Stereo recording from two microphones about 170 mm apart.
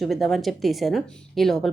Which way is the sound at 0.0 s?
Centre (ahead or behind).